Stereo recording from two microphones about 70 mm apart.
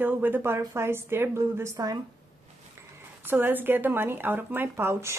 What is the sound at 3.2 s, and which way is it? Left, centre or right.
Speech, right.